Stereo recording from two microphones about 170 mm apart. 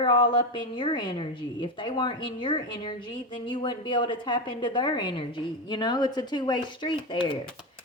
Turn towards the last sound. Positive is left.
turn(degrees=30)  # may be behind; listen again after turning